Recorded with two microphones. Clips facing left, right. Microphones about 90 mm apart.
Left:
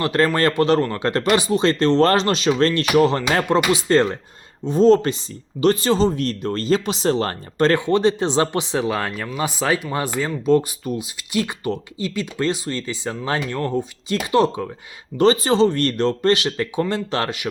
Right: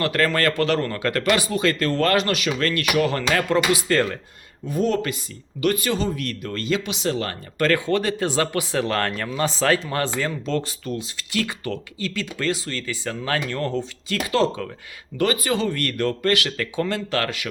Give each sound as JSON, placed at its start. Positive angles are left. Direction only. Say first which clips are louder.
{"t": 0.0, "sound": "speech", "louder": "left 3 dB", "side_deg": 25}